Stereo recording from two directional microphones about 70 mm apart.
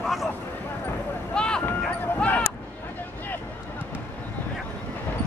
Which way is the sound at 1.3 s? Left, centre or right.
Centre.